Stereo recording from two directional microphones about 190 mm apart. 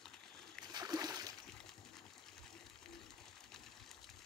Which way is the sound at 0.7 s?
20° right (ahead or behind).